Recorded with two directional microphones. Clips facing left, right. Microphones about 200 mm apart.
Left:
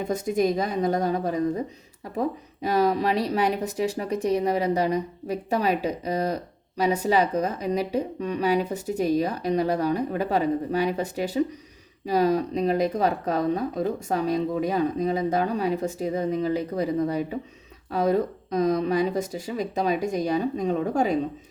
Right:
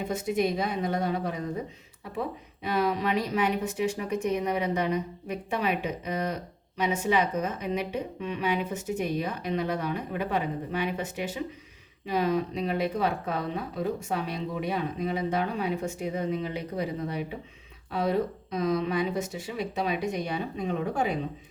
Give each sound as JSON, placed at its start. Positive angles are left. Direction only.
{"t": 0.0, "sound": "speech", "side_deg": 45}